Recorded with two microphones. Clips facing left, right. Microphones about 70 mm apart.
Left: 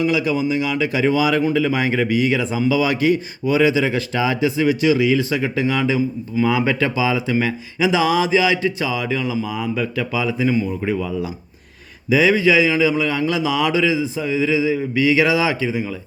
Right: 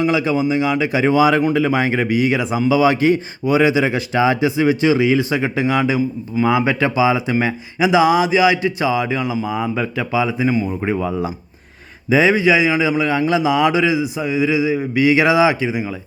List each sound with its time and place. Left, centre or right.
0.0 s speech: right